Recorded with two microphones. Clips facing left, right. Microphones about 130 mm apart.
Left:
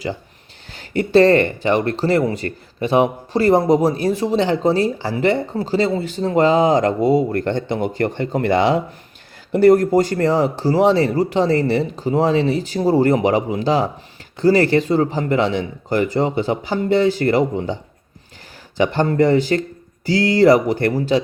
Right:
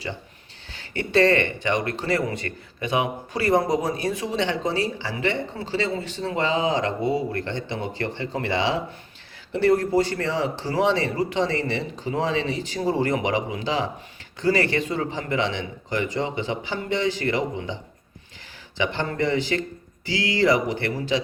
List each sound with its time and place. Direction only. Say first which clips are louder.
0.8 s speech: left 7 dB; 35° left (ahead or behind)
18.8 s speech: left 9 dB; 40° left (ahead or behind)